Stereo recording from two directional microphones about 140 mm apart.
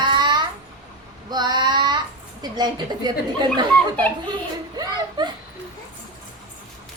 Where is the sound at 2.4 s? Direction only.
30° right (ahead or behind).